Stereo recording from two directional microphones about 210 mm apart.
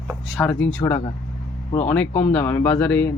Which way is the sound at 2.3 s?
10° left (ahead or behind).